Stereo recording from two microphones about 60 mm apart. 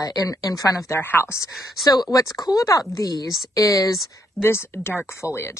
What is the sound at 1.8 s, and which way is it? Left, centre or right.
Speech, left.